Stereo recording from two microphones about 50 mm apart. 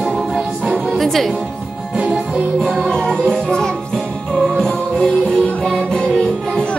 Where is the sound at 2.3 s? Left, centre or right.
Centre.